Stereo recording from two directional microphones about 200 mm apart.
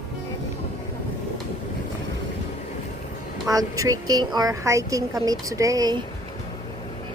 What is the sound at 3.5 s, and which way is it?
A woman's voice, 15° right (ahead or behind).